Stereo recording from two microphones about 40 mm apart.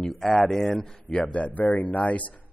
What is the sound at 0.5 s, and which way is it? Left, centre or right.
Speech, centre.